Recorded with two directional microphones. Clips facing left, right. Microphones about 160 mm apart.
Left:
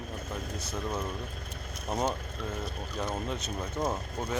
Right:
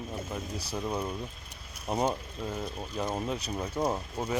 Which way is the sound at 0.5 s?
35° right (ahead or behind).